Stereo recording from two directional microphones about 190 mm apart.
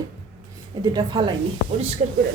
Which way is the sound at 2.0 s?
40° right (ahead or behind).